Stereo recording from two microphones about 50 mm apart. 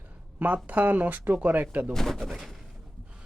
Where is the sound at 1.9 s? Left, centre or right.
Centre.